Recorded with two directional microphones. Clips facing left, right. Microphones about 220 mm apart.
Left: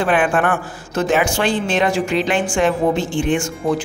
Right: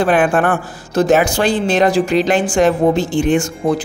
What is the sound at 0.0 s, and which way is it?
A man's voice, 40° right (ahead or behind).